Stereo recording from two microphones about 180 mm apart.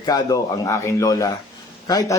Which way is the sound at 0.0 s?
20° left (ahead or behind).